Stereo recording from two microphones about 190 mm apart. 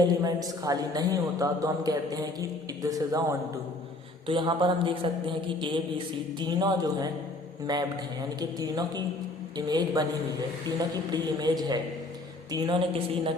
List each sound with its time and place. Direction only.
0.0 s speech: 20° right (ahead or behind)